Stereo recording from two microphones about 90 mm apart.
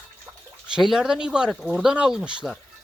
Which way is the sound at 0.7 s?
5° right (ahead or behind).